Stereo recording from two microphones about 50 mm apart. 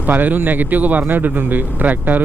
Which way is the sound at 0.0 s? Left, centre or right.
Right.